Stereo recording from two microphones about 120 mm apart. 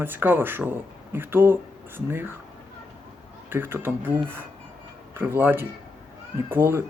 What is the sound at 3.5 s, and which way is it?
Speech, 20° right (ahead or behind).